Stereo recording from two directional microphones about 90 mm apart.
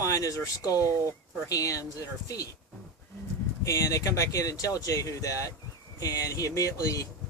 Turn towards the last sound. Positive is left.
turn(degrees=40)  # may be behind; listen again after turning